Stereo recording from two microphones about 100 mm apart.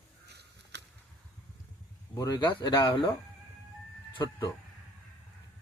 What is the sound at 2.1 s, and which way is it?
Speech, 35° left (ahead or behind).